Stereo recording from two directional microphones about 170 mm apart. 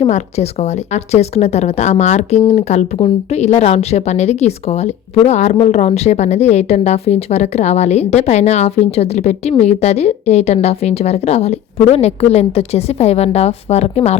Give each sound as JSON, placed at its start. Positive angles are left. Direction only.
{"t": 0.0, "sound": "a woman's voice", "side_deg": 40}